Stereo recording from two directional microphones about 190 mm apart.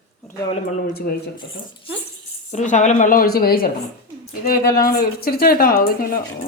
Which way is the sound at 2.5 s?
40° left (ahead or behind).